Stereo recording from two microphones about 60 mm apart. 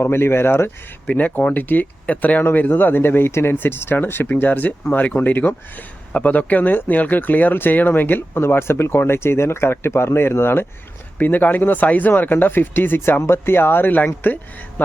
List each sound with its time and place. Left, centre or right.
0.0 s speech: left
1.0 s speech: left